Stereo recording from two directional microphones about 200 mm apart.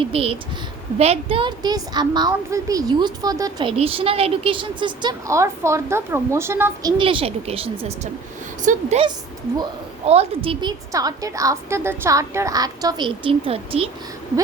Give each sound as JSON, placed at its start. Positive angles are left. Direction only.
{"t": 0.0, "sound": "a woman's voice", "side_deg": -30}
{"t": 7.0, "sound": "a woman's voice", "side_deg": -25}
{"t": 10.1, "sound": "a woman's voice", "side_deg": -30}